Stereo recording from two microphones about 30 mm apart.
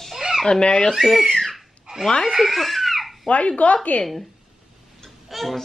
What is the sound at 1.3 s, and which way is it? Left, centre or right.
Speech, centre.